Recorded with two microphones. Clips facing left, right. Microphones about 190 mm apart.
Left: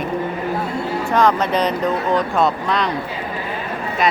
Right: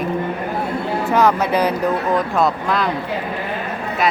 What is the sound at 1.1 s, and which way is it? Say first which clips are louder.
Speech: right 1 dB; 5° right (ahead or behind).